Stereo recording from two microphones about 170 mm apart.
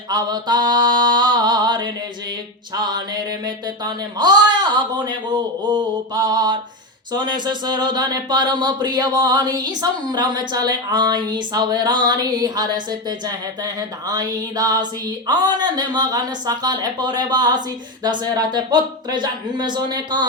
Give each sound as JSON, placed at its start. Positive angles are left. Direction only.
{"t": 0.1, "sound": "speech", "side_deg": -25}